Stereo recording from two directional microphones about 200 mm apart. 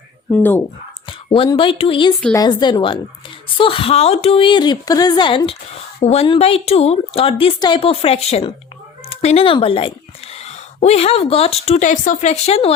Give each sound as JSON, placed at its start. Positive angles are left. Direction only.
{"t": 1.0, "sound": "a woman's voice", "side_deg": 25}